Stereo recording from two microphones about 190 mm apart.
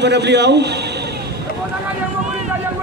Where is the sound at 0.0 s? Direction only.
65° right (ahead or behind).